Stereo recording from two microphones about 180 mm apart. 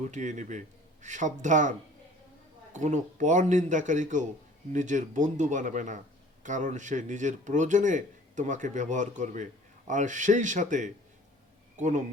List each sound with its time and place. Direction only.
0.0 s speech: 40° right (ahead or behind)
2.7 s speech: 40° right (ahead or behind)